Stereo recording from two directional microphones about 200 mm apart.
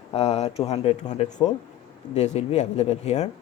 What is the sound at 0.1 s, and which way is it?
Speech, 30° left (ahead or behind).